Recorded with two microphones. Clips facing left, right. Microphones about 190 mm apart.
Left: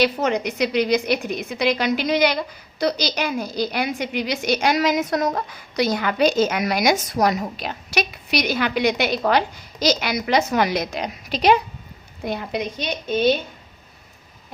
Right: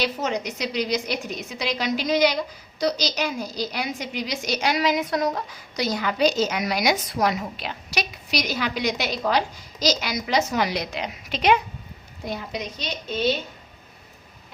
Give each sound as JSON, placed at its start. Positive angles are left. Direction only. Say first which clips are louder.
{"t": 0.0, "sound": "a woman's voice", "louder": "left 6 dB", "side_deg": 60}
{"t": 12.2, "sound": "a woman's voice", "louder": "left 5 dB", "side_deg": 60}